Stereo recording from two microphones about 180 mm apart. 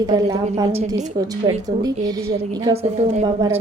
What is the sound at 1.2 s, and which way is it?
Speech, 20° right (ahead or behind).